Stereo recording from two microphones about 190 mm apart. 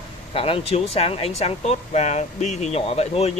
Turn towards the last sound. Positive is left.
turn(degrees=35)  # may be behind; listen again after turning